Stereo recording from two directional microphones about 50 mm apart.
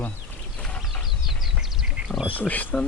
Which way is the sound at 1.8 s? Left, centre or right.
Centre.